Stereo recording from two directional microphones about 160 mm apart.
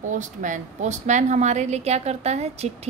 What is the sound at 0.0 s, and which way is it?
A woman's voice, 50° right (ahead or behind).